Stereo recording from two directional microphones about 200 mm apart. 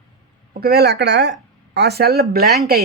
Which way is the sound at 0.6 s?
50° right (ahead or behind).